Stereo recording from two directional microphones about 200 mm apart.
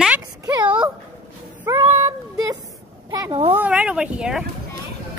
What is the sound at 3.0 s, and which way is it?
Speech, 20° right (ahead or behind).